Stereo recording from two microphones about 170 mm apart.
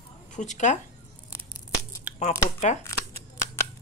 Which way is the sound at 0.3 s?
45° left (ahead or behind).